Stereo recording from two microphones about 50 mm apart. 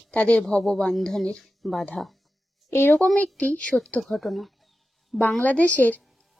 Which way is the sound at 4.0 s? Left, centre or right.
Centre.